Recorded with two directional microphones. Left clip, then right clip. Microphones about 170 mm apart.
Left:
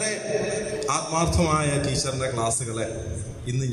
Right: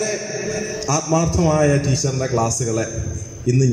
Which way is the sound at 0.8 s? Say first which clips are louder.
Right 5 dB; 45° right (ahead or behind).